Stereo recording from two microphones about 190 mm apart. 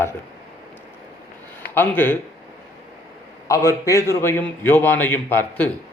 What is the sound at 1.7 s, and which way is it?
Speech, 10° left (ahead or behind).